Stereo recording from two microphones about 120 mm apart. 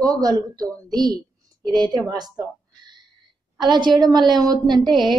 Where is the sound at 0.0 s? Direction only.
35° right (ahead or behind).